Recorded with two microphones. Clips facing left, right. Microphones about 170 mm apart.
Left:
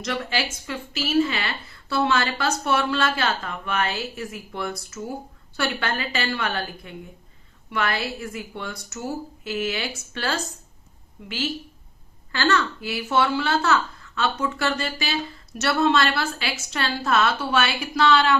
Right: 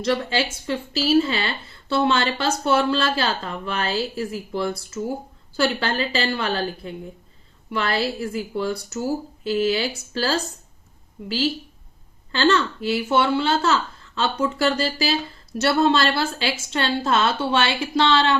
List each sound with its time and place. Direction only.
0.0 s speech: 30° right (ahead or behind)